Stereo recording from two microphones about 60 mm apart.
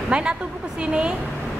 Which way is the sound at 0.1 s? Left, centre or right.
Centre.